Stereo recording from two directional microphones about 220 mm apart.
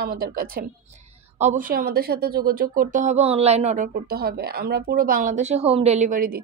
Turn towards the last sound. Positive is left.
turn(degrees=-40)  # may be behind; listen again after turning